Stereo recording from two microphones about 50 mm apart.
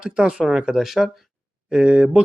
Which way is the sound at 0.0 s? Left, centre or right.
Centre.